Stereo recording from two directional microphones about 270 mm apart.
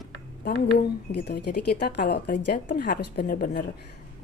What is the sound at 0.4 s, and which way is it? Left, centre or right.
A woman's voice, left.